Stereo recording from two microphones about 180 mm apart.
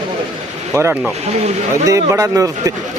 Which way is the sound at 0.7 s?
10° right (ahead or behind).